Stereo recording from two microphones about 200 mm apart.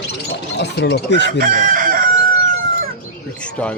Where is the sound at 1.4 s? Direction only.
40° right (ahead or behind).